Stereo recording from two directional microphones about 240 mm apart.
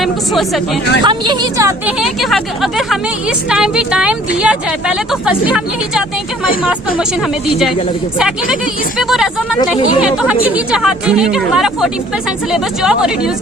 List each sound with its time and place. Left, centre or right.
0.0 s speech: centre
1.0 s a woman's voice: centre
2.0 s speech: centre
9.0 s speech: centre